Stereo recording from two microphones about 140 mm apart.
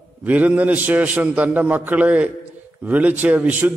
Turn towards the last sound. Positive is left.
turn(degrees=-10)  # may be behind; listen again after turning